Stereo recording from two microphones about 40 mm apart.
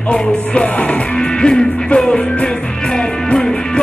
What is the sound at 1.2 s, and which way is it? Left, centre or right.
Music, left.